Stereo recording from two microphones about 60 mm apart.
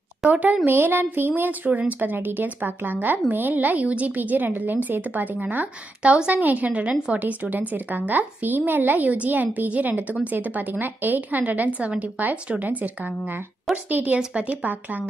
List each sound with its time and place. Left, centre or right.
0.2 s speech: right
0.7 s a woman's voice: right